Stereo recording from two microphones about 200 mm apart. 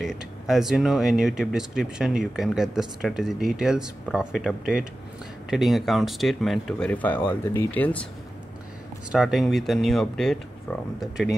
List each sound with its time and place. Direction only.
0.0 s speech: centre (ahead or behind)
9.1 s speech: centre (ahead or behind)